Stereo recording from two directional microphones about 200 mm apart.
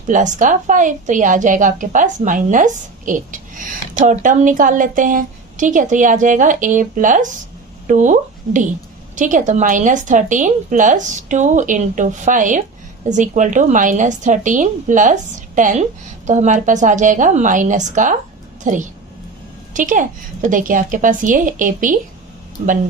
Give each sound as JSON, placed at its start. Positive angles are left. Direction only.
{"t": 0.1, "sound": "a woman's voice", "side_deg": -40}